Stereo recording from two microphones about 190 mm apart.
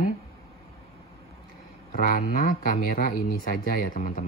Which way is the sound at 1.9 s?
45° left (ahead or behind).